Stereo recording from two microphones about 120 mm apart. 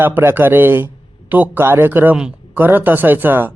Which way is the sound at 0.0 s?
20° right (ahead or behind).